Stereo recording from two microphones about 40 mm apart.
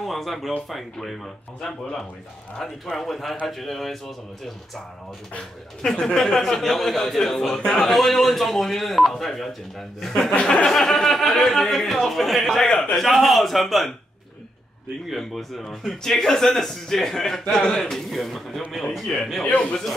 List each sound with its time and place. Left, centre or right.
0.0 s a man's voice: centre
5.8 s speech: centre
10.4 s a man's voice: centre
15.0 s a man's voice: centre
16.2 s speech: centre